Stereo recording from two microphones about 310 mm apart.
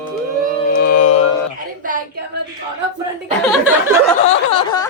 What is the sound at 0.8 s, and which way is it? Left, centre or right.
Mantra, left.